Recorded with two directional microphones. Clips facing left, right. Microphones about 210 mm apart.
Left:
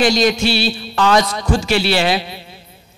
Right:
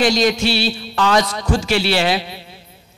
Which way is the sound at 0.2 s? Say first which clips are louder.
Left 1 dB; 10° left (ahead or behind).